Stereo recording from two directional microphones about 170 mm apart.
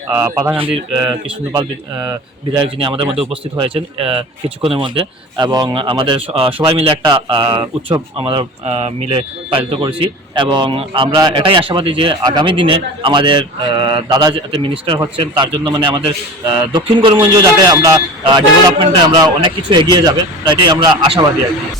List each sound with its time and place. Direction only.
0.1 s speech: 15° right (ahead or behind)